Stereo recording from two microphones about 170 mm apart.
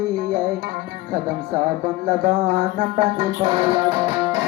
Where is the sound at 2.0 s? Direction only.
55° right (ahead or behind).